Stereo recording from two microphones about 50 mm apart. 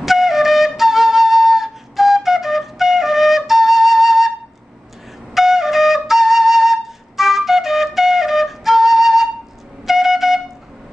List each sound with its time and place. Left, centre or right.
0.0 s flute: centre
5.3 s flute: centre
9.8 s wind instrument: centre